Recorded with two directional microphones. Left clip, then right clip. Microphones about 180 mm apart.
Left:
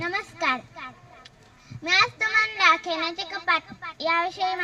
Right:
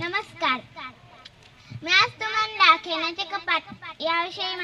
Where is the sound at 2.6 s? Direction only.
25° right (ahead or behind).